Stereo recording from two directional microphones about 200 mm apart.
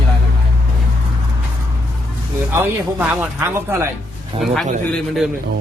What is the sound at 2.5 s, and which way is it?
A man's voice, 10° right (ahead or behind).